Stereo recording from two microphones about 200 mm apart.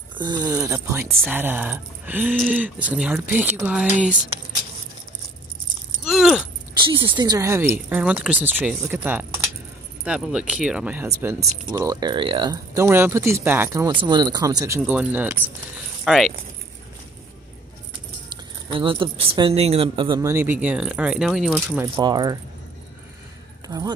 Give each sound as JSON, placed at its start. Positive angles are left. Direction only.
{"t": 0.2, "sound": "speech", "side_deg": -20}
{"t": 6.0, "sound": "keys jangling", "side_deg": 0}
{"t": 6.8, "sound": "speech", "side_deg": -25}
{"t": 18.7, "sound": "speech", "side_deg": -25}
{"t": 21.9, "sound": "speech", "side_deg": -20}
{"t": 23.7, "sound": "speech", "side_deg": -20}